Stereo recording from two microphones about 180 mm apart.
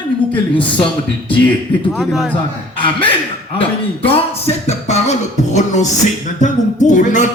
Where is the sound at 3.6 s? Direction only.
30° left (ahead or behind).